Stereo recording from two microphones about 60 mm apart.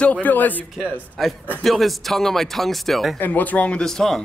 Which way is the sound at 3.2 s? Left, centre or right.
Left.